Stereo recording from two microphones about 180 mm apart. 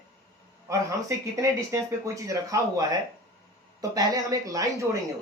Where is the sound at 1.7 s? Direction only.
15° right (ahead or behind).